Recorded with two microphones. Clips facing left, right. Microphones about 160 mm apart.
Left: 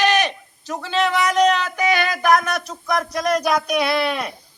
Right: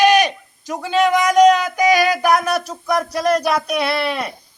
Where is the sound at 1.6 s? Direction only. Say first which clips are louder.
Right 5 dB; 10° right (ahead or behind).